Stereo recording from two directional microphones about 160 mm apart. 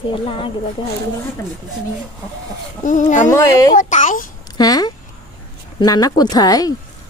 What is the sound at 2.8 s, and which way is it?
Speech, 50° left (ahead or behind).